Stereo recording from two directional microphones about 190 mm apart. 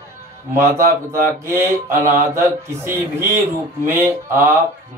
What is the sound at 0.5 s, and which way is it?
Mantra, 15° right (ahead or behind).